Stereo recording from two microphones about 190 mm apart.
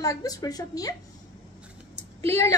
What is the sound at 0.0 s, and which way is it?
Speech, 20° left (ahead or behind).